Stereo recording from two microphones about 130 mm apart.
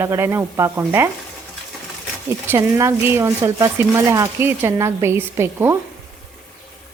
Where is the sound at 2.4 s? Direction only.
20° right (ahead or behind).